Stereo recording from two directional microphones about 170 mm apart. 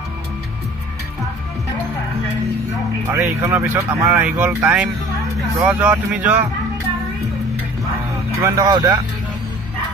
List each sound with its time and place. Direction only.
3.1 s speech: 15° right (ahead or behind)
8.4 s speech: 20° right (ahead or behind)